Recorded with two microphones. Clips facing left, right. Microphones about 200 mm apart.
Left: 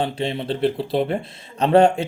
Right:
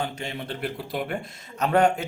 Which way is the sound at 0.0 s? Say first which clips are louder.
Left 7 dB; 30° left (ahead or behind).